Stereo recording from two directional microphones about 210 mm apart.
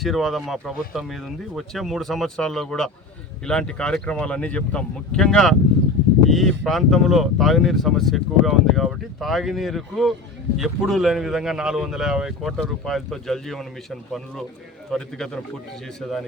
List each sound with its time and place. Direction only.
0.0 s speech: centre (ahead or behind)
14.8 s speech: centre (ahead or behind)